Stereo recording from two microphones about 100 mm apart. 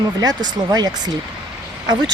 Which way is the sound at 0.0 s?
40° right (ahead or behind).